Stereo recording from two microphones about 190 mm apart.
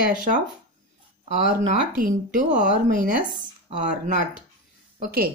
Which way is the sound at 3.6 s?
40° right (ahead or behind).